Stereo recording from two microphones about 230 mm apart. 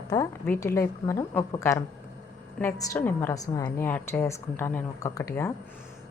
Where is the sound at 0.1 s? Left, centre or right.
Centre.